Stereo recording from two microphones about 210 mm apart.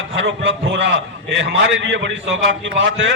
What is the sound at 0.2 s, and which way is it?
A man's voice, 60° right (ahead or behind).